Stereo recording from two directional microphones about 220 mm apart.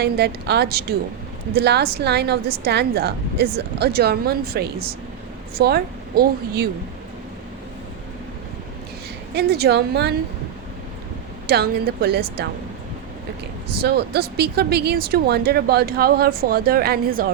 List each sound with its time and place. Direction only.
0.0 s a woman's voice: 50° right (ahead or behind)
9.3 s a woman's voice: 45° right (ahead or behind)
11.4 s a woman's voice: 45° right (ahead or behind)
13.8 s a woman's voice: 45° right (ahead or behind)